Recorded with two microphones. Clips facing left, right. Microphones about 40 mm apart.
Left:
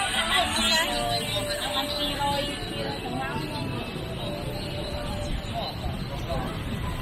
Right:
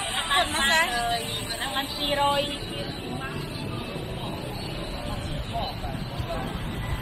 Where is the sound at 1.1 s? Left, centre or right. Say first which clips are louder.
Left 2 dB; left.